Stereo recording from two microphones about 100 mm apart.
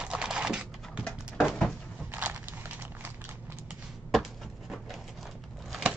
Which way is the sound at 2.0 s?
20° right (ahead or behind).